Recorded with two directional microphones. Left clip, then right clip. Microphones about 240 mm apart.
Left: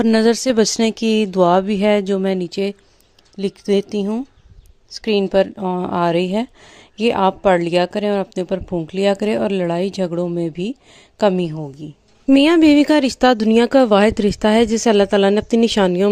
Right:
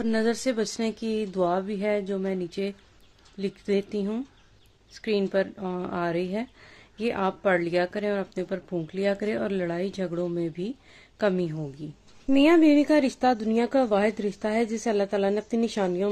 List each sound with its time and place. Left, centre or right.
0.0 s speech: left; by 11.9 s centre
12.3 s speech: left